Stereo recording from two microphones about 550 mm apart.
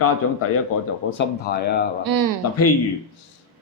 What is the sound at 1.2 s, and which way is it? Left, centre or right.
Speech, centre.